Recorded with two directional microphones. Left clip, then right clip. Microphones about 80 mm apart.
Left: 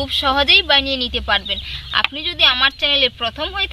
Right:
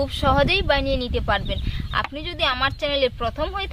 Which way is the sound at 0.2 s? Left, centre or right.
Centre.